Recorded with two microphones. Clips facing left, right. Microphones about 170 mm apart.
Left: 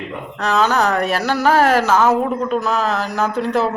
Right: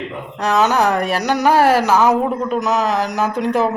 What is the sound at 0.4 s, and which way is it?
Speech, 15° right (ahead or behind).